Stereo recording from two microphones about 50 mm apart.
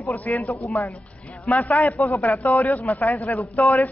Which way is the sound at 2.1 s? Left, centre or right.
Centre.